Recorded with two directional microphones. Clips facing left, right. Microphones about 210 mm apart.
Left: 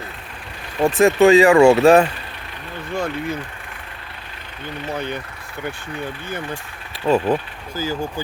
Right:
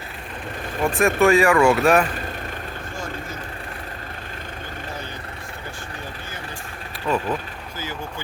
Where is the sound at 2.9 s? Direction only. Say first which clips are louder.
Left 11 dB; 60° left (ahead or behind).